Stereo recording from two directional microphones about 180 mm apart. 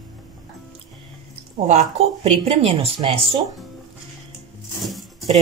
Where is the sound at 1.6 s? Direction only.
40° right (ahead or behind).